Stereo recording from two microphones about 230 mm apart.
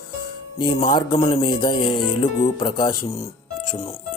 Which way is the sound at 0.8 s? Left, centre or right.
Left.